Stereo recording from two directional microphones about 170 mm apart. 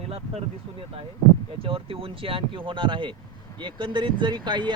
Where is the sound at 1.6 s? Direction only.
35° right (ahead or behind).